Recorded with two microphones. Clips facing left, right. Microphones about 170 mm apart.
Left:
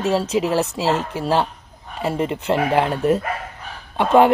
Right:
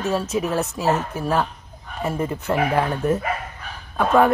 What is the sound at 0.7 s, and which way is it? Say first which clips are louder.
Speech: left 1 dB; 80° left.